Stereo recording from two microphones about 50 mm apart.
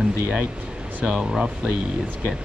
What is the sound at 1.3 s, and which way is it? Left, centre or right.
Speech, centre.